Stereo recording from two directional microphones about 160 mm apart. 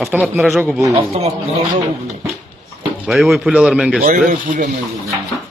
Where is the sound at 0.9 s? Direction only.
40° right (ahead or behind).